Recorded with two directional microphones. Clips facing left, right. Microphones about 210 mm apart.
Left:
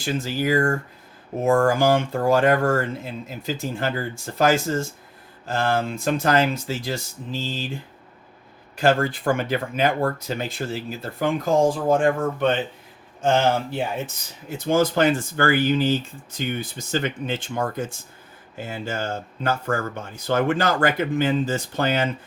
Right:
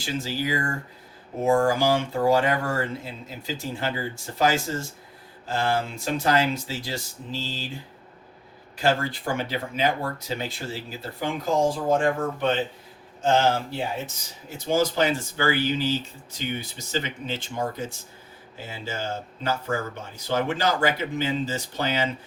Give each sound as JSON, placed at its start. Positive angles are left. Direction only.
{"t": 0.0, "sound": "speech", "side_deg": 50}
{"t": 8.8, "sound": "speech", "side_deg": 50}
{"t": 13.2, "sound": "speech", "side_deg": 55}